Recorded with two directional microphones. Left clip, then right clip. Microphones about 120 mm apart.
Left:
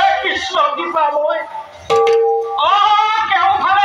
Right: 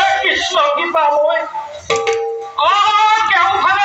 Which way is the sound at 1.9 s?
30° left (ahead or behind).